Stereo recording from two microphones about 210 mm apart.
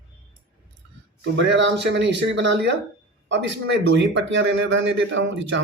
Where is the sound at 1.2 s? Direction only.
60° right (ahead or behind).